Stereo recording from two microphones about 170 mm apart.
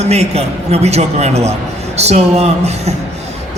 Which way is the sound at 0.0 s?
40° right (ahead or behind).